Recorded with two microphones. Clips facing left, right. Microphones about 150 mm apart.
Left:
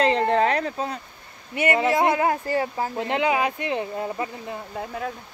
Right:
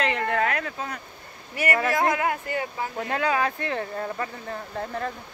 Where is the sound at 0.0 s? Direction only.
30° left (ahead or behind).